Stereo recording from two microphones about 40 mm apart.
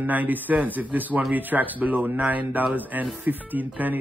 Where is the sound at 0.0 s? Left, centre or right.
Right.